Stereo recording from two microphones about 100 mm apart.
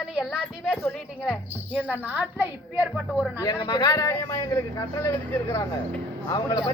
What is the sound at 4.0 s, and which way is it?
Speech, 25° left (ahead or behind).